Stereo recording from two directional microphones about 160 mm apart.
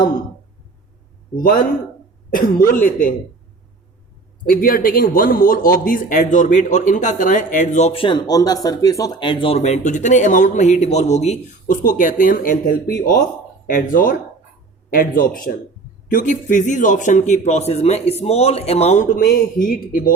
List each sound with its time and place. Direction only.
1.4 s speech: 65° left (ahead or behind)
4.4 s a man's voice: 65° left (ahead or behind)